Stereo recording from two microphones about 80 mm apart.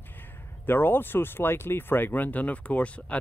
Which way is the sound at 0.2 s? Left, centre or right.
Left.